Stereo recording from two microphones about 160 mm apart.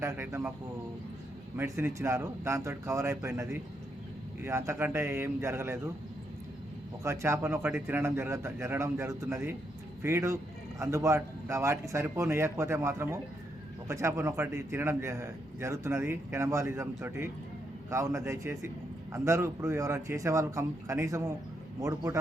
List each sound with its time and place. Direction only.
0.0 s a man's voice: 15° right (ahead or behind)
1.5 s a man's voice: 15° right (ahead or behind)
7.0 s a man's voice: 15° right (ahead or behind)